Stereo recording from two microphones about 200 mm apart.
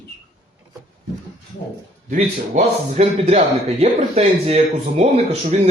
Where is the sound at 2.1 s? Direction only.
35° right (ahead or behind).